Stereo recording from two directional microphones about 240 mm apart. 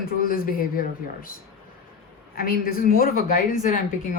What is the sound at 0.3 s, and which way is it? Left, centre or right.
Speech, left.